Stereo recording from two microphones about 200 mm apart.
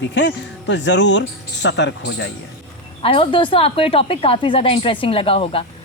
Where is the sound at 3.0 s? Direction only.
25° left (ahead or behind).